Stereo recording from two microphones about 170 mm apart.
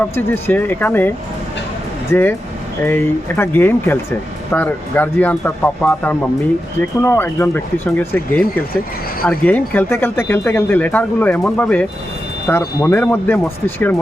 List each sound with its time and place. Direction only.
0.3 s speech: 10° left (ahead or behind)